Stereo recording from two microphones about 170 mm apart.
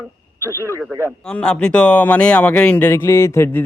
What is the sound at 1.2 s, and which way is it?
Speech, 5° left (ahead or behind).